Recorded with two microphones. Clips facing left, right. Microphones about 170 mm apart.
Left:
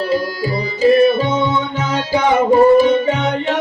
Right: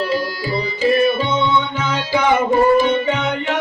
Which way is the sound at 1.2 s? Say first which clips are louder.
Left 1 dB; 40° left (ahead or behind).